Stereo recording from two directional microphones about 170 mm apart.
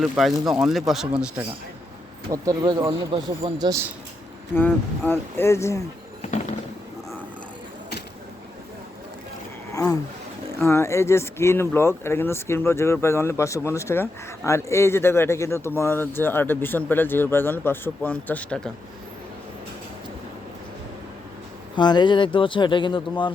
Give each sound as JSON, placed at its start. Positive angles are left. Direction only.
{"t": 0.0, "sound": "speech", "side_deg": 0}
{"t": 2.3, "sound": "speech", "side_deg": -20}
{"t": 3.7, "sound": "speech", "side_deg": -15}
{"t": 4.5, "sound": "speech", "side_deg": 15}
{"t": 9.7, "sound": "speech", "side_deg": 20}
{"t": 21.8, "sound": "speech", "side_deg": 25}